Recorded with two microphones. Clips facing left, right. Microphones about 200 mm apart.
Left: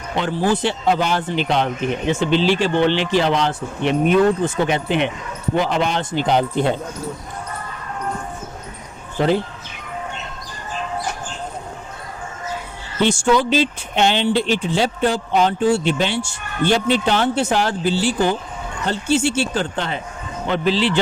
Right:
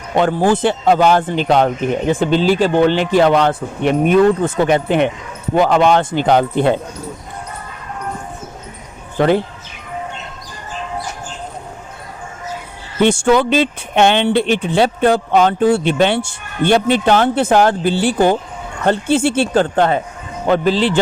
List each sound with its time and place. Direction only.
0.2 s speech: 50° right (ahead or behind)
13.0 s speech: 55° right (ahead or behind)